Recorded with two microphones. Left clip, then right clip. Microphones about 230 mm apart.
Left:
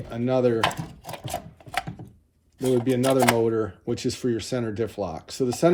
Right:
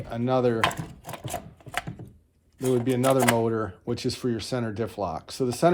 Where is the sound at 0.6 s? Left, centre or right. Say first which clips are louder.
Left 1 dB; centre.